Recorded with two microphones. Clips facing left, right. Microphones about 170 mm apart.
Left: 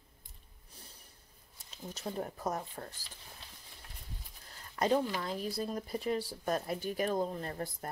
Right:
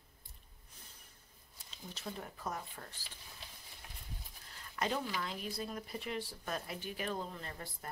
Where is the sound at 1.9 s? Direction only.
40° left (ahead or behind).